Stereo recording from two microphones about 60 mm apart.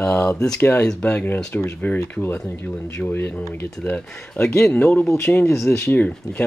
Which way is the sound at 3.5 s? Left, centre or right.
Left.